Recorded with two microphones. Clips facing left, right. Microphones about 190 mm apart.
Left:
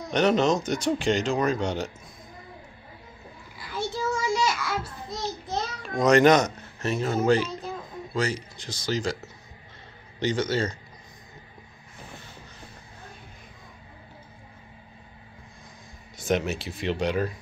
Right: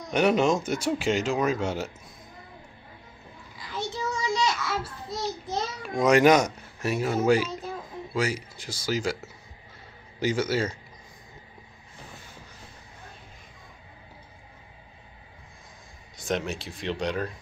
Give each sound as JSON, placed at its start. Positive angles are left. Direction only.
{"t": 0.1, "sound": "speech", "side_deg": -10}
{"t": 3.7, "sound": "child singing", "side_deg": -20}
{"t": 4.4, "sound": "a sound", "side_deg": 0}
{"t": 5.8, "sound": "speech", "side_deg": -5}
{"t": 16.2, "sound": "speech", "side_deg": 0}